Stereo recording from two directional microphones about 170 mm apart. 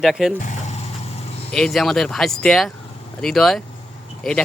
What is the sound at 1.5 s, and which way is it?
Speech, 5° left (ahead or behind).